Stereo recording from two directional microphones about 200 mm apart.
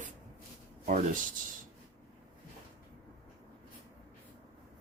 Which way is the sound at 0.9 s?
40° right (ahead or behind).